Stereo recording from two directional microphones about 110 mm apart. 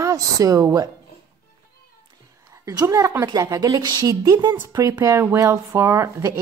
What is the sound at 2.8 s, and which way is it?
A woman's voice, 30° right (ahead or behind).